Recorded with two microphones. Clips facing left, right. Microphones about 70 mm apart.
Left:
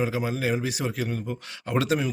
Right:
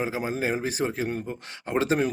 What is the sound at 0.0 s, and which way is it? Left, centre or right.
A man's voice, right.